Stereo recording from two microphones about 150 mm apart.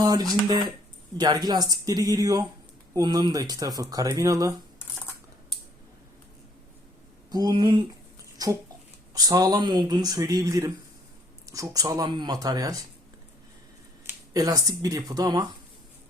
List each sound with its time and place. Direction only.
0.0 s speech: 25° right (ahead or behind)
7.3 s speech: 30° right (ahead or behind)
14.3 s speech: 25° right (ahead or behind)